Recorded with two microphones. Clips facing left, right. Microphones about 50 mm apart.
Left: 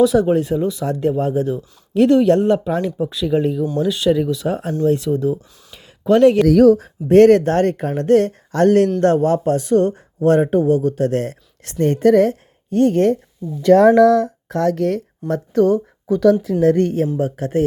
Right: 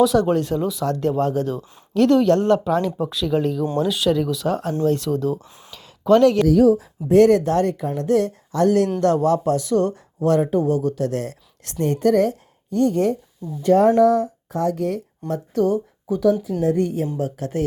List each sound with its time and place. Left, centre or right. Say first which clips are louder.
0.0 s speech: left 3 dB; centre
1.9 s speech: left 3 dB; left; by 4.4 s centre
4.4 s speech: left 2 dB; centre
5.7 s a sound: even; left
6.5 s speech: left 4 dB; left
13.6 s speech: left 4 dB; left
15.3 s speech: left 5 dB; left
17.2 s speech: left 5 dB; left